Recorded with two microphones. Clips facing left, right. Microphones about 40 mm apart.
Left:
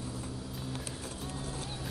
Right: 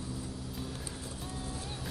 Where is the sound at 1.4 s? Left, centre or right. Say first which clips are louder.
Even; left.